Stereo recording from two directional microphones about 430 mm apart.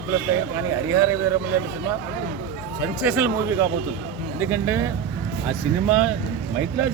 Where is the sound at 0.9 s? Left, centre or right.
Centre.